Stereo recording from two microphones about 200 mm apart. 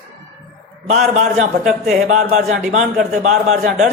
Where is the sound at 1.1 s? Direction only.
35° right (ahead or behind).